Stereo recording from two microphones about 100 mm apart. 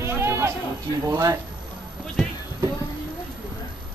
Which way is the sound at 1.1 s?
35° right (ahead or behind).